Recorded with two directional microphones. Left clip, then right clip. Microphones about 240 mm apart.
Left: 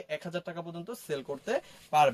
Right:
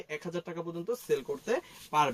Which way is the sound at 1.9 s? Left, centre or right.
Left.